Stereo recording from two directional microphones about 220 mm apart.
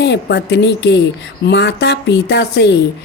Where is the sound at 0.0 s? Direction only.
50° left (ahead or behind).